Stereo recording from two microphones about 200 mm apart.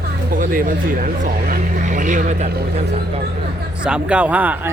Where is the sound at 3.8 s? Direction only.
5° right (ahead or behind).